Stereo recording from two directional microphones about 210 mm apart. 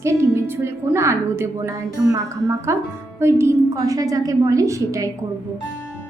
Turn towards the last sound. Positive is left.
turn(degrees=-15)  # may be behind; listen again after turning